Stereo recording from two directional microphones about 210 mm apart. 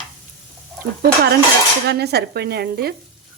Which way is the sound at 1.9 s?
50° right (ahead or behind).